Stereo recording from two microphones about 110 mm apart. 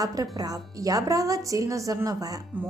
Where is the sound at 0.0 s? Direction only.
35° right (ahead or behind).